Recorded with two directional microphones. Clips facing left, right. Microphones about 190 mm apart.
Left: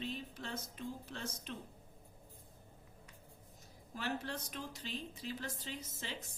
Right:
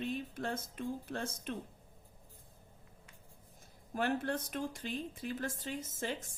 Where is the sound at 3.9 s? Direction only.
50° right (ahead or behind).